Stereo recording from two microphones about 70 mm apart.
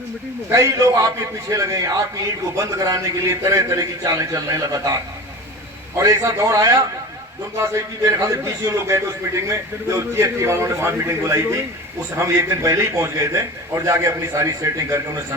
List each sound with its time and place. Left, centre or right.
0.5 s a man's voice: right
6.4 s a man's voice: right
7.6 s a man's voice: right